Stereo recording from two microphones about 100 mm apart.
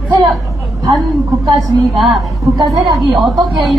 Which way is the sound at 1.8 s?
Centre (ahead or behind).